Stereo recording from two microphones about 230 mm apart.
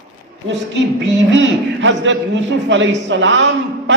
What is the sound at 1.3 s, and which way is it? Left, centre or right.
A man's voice, right.